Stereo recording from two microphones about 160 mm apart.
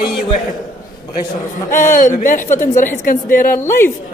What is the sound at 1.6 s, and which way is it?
A man's voice, 55° left (ahead or behind).